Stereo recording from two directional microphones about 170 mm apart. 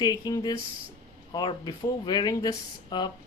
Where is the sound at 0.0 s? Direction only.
25° left (ahead or behind).